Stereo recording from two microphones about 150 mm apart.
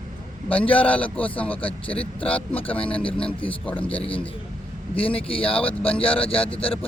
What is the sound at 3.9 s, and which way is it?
Speech, 40° left (ahead or behind).